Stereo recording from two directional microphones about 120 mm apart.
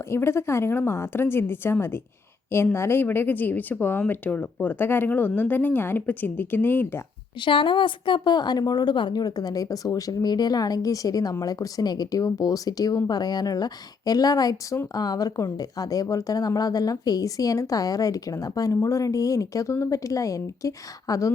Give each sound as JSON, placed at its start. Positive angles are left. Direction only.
{"t": 0.1, "sound": "speech", "side_deg": 20}
{"t": 7.4, "sound": "a woman's voice", "side_deg": 45}